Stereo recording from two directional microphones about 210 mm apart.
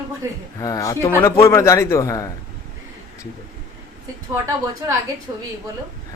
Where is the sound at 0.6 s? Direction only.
15° left (ahead or behind).